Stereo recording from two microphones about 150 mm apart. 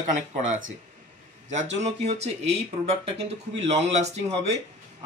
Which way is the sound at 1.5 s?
50° right (ahead or behind).